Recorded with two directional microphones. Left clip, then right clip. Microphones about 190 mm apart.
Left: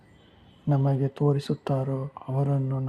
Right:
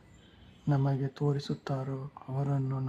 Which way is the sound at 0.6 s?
15° left (ahead or behind).